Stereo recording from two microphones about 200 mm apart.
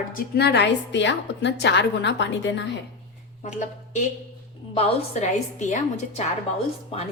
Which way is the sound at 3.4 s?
40° left (ahead or behind).